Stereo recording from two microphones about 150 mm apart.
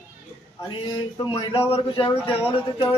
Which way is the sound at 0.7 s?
30° left (ahead or behind).